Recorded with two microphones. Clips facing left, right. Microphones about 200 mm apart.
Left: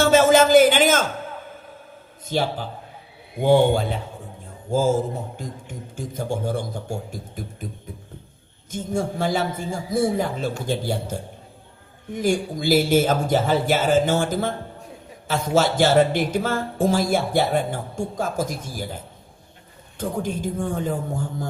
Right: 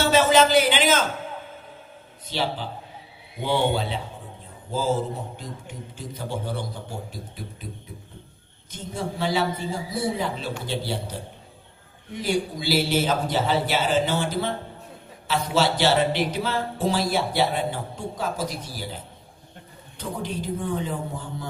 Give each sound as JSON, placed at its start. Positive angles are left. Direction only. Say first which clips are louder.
{"t": 0.0, "sound": "a man's voice", "louder": "left 3 dB", "side_deg": 50}
{"t": 2.2, "sound": "a man's voice", "louder": "left 4 dB", "side_deg": 45}
{"t": 8.7, "sound": "speech", "louder": "left 6 dB", "side_deg": 45}
{"t": 20.0, "sound": "speech", "louder": "left 5 dB", "side_deg": 45}